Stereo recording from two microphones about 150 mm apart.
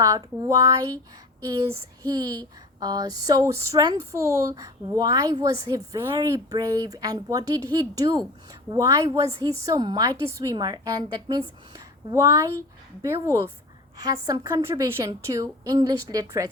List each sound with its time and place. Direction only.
0.0 s speech: 20° right (ahead or behind)
1.5 s female singing: 15° right (ahead or behind)
2.2 s speech: 25° right (ahead or behind)